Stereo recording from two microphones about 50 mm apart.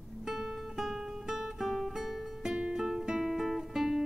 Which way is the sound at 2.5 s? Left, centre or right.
Centre.